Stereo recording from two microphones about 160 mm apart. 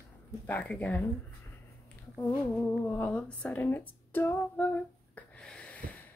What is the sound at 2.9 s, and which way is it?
Speech, 10° left (ahead or behind).